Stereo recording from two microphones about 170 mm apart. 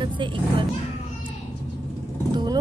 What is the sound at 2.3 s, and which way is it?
Vehicle, 25° right (ahead or behind).